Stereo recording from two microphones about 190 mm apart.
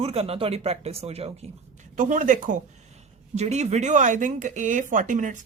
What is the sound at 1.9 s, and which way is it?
Speech, 45° right (ahead or behind).